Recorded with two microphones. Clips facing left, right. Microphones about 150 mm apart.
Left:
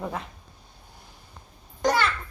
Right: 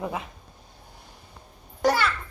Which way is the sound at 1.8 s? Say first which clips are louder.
Right 1 dB; 5° right (ahead or behind).